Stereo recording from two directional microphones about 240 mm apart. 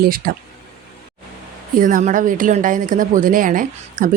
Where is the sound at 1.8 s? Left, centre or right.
Right.